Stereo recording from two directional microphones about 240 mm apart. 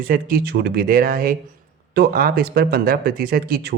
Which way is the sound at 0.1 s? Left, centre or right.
Right.